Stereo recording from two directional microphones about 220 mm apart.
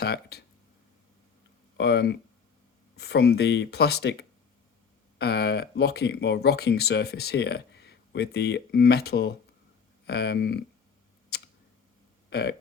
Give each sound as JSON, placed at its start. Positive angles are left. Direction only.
{"t": 0.0, "sound": "speech", "side_deg": 45}
{"t": 1.8, "sound": "speech", "side_deg": 50}
{"t": 11.3, "sound": "tick", "side_deg": 45}
{"t": 12.3, "sound": "a sound", "side_deg": 50}